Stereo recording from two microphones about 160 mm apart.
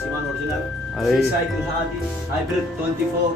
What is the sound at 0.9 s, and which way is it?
Speech, centre (ahead or behind).